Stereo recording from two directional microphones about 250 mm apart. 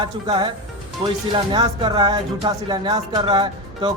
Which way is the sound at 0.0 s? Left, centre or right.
Centre.